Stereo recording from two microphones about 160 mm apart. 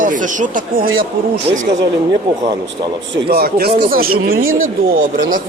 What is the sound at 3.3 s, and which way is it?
Speech, 75° right (ahead or behind).